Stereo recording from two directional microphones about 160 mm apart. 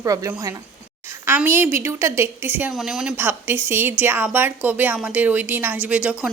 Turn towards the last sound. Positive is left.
turn(degrees=-5)  # may be behind; listen again after turning